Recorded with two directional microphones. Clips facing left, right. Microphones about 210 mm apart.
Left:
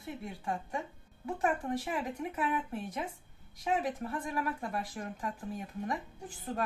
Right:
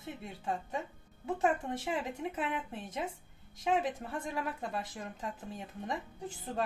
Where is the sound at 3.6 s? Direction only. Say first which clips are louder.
Right 1 dB; 25° right (ahead or behind).